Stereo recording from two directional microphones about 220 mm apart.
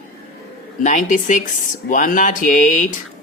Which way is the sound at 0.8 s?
35° left (ahead or behind).